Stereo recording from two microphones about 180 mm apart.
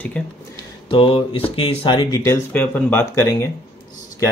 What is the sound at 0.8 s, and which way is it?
Speech, 30° left (ahead or behind).